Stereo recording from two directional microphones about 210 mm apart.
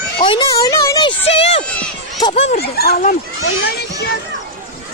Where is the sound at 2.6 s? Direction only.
50° left (ahead or behind).